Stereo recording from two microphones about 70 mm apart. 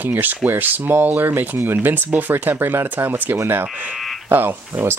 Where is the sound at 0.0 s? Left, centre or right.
Right.